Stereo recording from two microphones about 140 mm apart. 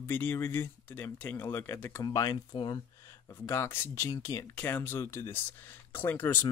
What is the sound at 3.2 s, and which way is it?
Speech, 15° left (ahead or behind).